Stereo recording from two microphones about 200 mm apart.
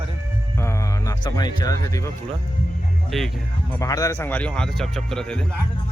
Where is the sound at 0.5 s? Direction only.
15° left (ahead or behind).